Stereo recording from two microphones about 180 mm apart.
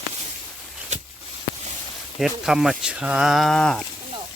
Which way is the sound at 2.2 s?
Centre (ahead or behind).